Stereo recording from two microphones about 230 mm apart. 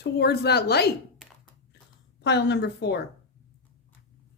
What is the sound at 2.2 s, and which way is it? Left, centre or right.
Speech, left.